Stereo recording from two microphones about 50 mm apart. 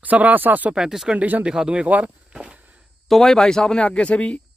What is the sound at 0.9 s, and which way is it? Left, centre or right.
Speech, centre.